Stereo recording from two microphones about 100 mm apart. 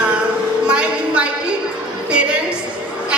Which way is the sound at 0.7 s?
10° right (ahead or behind).